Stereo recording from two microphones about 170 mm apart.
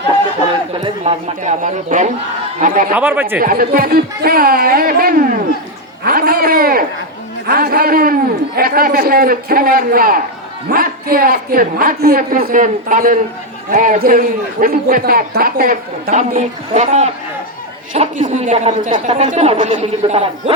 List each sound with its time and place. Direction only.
0.7 s a man's voice: 40° right (ahead or behind)
2.9 s speech: 10° right (ahead or behind)
3.4 s a man's voice: 60° right (ahead or behind); by 20.2 s 40° right (ahead or behind)